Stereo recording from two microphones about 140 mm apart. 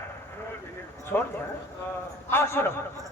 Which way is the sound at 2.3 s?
20° left (ahead or behind).